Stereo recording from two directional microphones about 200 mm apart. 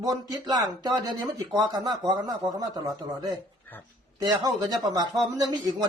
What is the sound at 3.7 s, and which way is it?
Speech, 10° left (ahead or behind).